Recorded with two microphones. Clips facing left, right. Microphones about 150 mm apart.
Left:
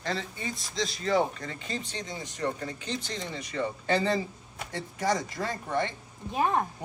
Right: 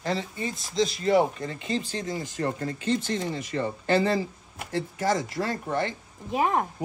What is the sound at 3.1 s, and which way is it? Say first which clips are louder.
Speech: right 5 dB; 45° right (ahead or behind).